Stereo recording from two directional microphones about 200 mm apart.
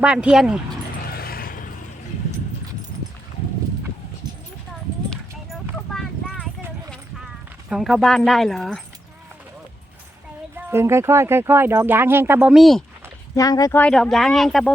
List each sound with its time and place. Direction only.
0.0 s speech: 5° right (ahead or behind)
1.0 s a sound: 50° left (ahead or behind)
5.1 s a sound: 5° left (ahead or behind)
7.7 s speech: centre (ahead or behind)
10.7 s speech: 10° right (ahead or behind)
13.3 s speech: 15° left (ahead or behind); by 14.7 s centre (ahead or behind)